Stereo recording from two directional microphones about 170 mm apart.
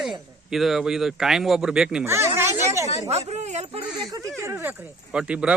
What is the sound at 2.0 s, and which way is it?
Speech, 15° right (ahead or behind).